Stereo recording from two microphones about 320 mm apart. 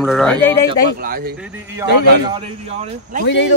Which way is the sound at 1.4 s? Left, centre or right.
Centre.